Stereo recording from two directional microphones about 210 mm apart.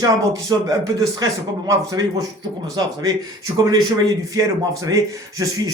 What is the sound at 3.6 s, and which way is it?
A man's voice, 20° right (ahead or behind).